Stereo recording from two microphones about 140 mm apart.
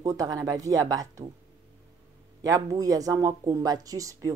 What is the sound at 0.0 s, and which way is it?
Speech, 25° right (ahead or behind).